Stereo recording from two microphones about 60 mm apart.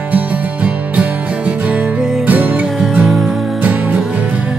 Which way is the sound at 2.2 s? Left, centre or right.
Right.